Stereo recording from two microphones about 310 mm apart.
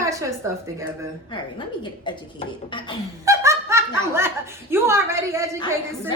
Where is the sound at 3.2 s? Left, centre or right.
Centre.